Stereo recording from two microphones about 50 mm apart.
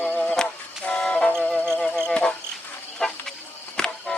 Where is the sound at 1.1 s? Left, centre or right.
Centre.